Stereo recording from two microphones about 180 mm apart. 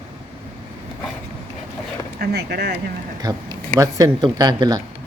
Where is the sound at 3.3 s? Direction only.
20° right (ahead or behind).